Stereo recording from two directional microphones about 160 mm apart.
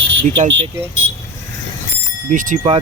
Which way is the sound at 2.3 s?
50° right (ahead or behind).